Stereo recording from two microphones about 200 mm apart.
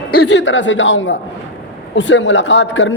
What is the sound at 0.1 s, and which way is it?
A man's voice, 55° left (ahead or behind).